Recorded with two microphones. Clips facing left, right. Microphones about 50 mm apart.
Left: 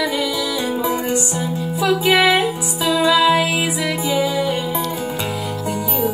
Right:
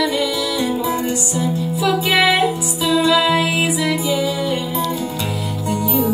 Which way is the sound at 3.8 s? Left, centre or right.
Left.